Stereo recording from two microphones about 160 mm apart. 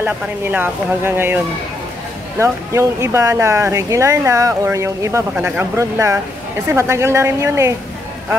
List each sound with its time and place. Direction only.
0.0 s speech: 10° right (ahead or behind)